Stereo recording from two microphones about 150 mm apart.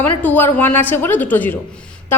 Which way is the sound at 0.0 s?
10° left (ahead or behind).